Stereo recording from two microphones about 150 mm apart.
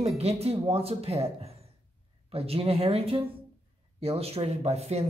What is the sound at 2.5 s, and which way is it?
Speech, 40° right (ahead or behind).